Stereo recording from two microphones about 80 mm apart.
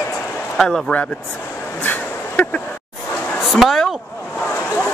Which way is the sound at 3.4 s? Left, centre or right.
Centre.